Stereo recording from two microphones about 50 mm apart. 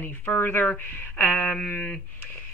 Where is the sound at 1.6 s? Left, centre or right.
Left.